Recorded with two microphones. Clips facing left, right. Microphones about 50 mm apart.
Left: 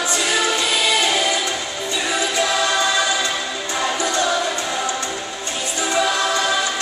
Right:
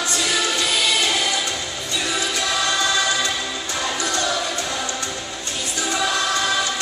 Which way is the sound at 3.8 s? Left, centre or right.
Centre.